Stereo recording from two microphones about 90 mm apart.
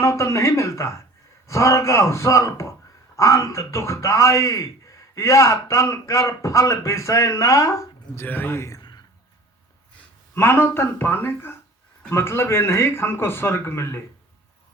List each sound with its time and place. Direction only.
0.0 s a man's voice: 30° left (ahead or behind)
8.8 s a sound: 50° left (ahead or behind)
10.3 s speech: 25° left (ahead or behind)